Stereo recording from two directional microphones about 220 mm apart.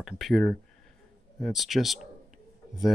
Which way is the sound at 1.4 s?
Centre (ahead or behind).